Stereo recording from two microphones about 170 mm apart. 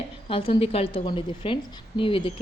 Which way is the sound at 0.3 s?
30° left (ahead or behind).